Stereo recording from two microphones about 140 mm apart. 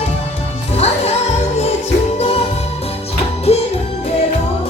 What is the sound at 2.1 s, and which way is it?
Music, 45° left (ahead or behind).